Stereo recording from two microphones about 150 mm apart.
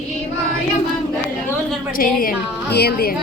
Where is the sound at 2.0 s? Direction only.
75° left (ahead or behind); by 3.1 s 90° left.